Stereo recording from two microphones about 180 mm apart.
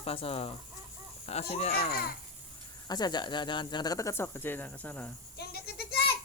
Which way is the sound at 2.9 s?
25° left (ahead or behind).